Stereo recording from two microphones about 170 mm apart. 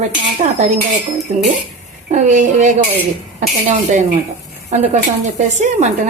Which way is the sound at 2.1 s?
45° right (ahead or behind).